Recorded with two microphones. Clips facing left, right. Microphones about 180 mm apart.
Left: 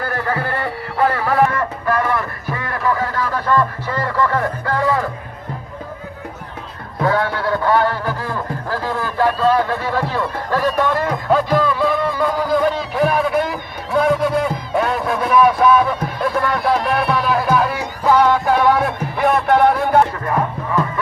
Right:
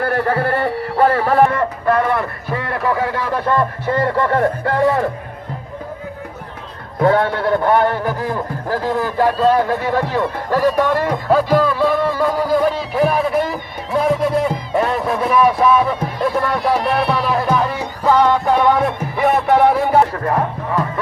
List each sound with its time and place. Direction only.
0.0 s speech: 30° right (ahead or behind)
7.0 s a man's voice: 25° right (ahead or behind); by 16.0 s centre (ahead or behind)
16.8 s music: centre (ahead or behind)
20.2 s music: 35° right (ahead or behind)